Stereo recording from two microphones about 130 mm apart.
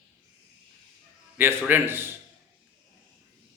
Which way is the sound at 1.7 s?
15° right (ahead or behind).